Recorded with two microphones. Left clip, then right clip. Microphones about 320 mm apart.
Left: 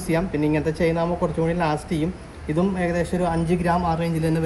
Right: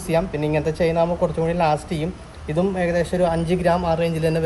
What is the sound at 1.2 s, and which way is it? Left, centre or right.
A man's voice, right.